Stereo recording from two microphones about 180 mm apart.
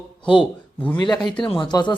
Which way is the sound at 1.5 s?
25° left (ahead or behind).